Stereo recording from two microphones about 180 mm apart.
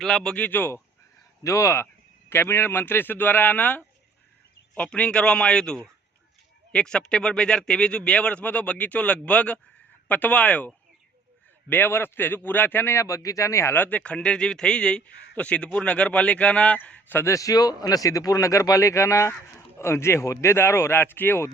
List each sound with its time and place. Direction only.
0.0 s a man's voice: 5° left (ahead or behind)